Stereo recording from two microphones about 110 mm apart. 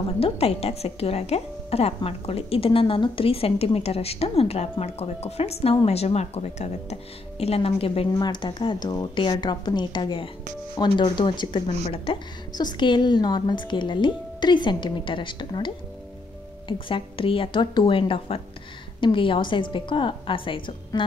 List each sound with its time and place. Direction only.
0.2 s a woman's voice: 65° left (ahead or behind)
8.2 s a woman's voice: 45° left (ahead or behind)
12.5 s speech: 40° left (ahead or behind)